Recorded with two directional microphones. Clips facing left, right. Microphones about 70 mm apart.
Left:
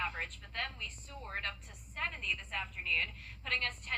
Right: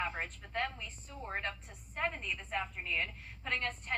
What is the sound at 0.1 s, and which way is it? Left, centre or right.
A woman's voice, centre.